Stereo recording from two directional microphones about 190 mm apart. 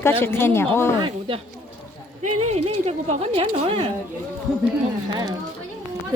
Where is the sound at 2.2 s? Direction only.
35° right (ahead or behind).